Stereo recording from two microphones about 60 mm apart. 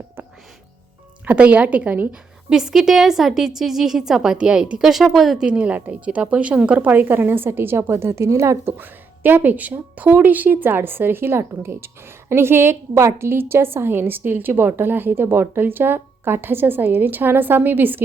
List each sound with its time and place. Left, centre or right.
1.2 s a woman's voice: right
2.5 s a woman's voice: centre
5.5 s a woman's voice: right
8.6 s a woman's voice: right